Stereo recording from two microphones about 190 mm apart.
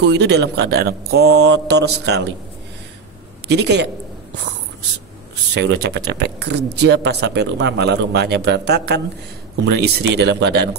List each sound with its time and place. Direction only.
0.0 s speech: 65° right (ahead or behind)
3.4 s speech: 65° right (ahead or behind)
5.3 s speech: 60° right (ahead or behind)